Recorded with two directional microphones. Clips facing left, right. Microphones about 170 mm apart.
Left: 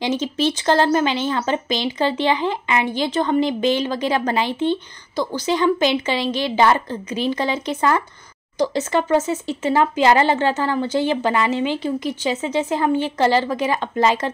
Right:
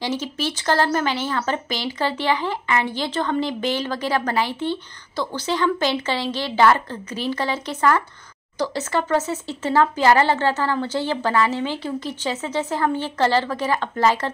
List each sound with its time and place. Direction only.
0.0 s speech: 20° left (ahead or behind)